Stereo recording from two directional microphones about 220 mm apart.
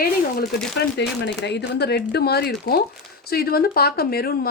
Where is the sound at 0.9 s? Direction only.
50° left (ahead or behind).